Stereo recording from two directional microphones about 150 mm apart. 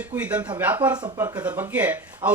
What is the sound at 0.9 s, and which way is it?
Speech, 30° right (ahead or behind).